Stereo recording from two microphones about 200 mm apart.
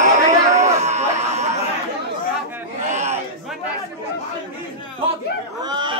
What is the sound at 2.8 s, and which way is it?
Crowd, 35° right (ahead or behind).